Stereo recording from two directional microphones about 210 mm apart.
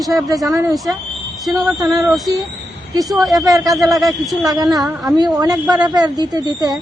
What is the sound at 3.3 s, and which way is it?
Speech, 15° right (ahead or behind).